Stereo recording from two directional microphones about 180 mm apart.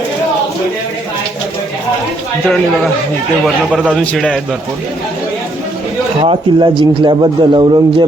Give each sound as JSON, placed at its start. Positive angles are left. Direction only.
{"t": 3.4, "sound": "a man's voice", "side_deg": -5}
{"t": 3.9, "sound": "a man's voice", "side_deg": 5}
{"t": 6.2, "sound": "a man's voice", "side_deg": -25}